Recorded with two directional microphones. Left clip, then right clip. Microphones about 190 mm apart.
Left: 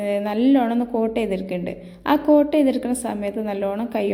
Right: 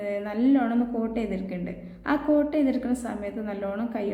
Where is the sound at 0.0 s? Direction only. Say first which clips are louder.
Left 6 dB; 30° left (ahead or behind).